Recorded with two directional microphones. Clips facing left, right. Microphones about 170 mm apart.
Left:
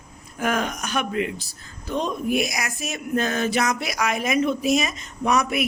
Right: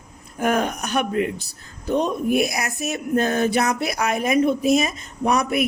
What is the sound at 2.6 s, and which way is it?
A man's voice, 40° right (ahead or behind).